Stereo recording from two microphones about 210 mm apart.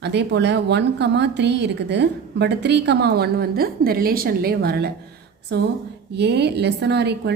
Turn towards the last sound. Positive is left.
turn(degrees=-55)  # may be behind; listen again after turning